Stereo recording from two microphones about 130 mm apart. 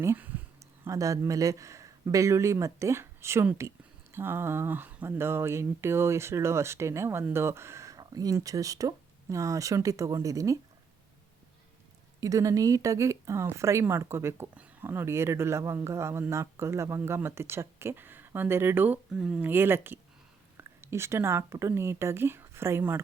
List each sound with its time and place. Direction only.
0.0 s speech: 15° right (ahead or behind)
12.2 s speech: 25° right (ahead or behind)